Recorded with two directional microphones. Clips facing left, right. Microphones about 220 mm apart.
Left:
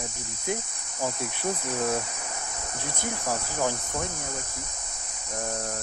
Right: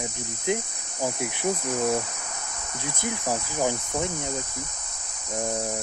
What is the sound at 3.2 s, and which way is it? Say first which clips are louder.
Cricket: right 2 dB; 15° right (ahead or behind).